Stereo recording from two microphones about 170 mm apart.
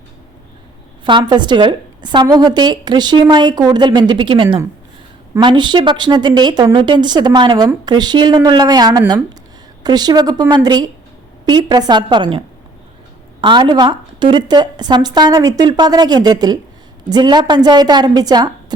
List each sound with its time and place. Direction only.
1.0 s a woman's voice: 25° right (ahead or behind)
13.4 s a woman's voice: 25° right (ahead or behind)